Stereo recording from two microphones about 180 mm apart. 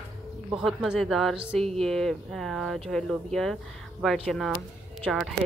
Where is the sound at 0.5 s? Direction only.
Centre (ahead or behind).